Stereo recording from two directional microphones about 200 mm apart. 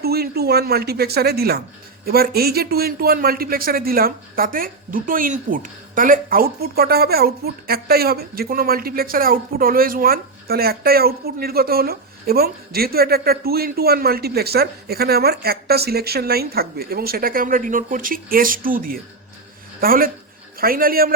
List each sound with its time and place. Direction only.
0.0 s speech: 50° right (ahead or behind)